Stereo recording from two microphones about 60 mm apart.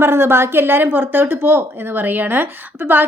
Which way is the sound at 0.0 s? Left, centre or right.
Right.